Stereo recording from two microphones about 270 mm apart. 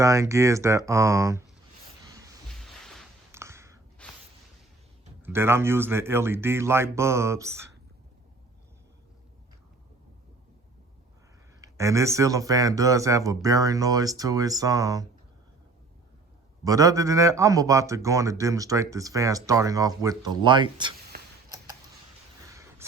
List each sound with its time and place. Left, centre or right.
0.0 s a man's voice: centre
2.5 s music: centre
3.3 s a sound: centre
4.0 s a sound: centre
5.2 s a man's voice: centre
11.6 s a man's voice: centre
16.6 s a man's voice: centre